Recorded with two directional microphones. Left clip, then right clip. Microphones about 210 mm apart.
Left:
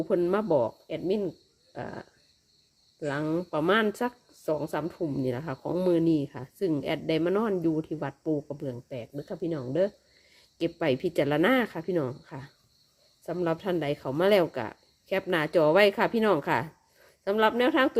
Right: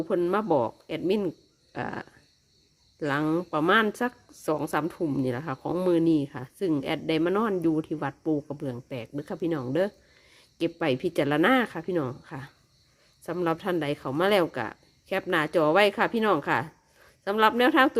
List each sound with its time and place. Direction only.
0.0 s a woman's voice: 10° right (ahead or behind)
10.6 s a woman's voice: 10° right (ahead or behind)